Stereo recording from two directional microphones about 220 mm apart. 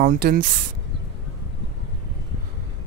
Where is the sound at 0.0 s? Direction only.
45° right (ahead or behind).